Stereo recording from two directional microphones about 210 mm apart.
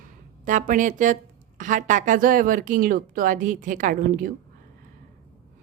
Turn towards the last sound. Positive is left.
turn(degrees=-40)  # may be behind; listen again after turning